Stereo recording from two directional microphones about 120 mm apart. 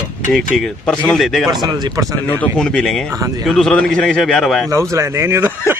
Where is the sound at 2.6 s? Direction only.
5° left (ahead or behind).